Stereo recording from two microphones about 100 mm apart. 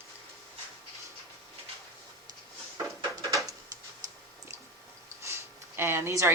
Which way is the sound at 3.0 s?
35° right (ahead or behind).